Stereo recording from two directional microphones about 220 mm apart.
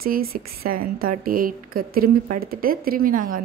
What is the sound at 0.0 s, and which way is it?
A woman's voice, 40° right (ahead or behind).